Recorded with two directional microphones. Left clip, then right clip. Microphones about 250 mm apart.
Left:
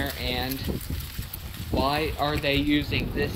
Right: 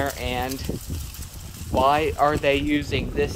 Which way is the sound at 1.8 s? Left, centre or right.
Centre.